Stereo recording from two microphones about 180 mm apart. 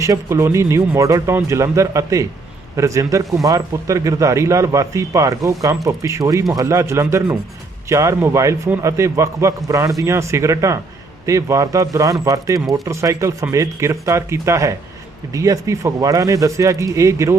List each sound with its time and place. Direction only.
0.0 s speech: 15° right (ahead or behind)